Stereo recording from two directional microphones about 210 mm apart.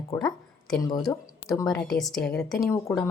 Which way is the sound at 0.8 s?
20° left (ahead or behind).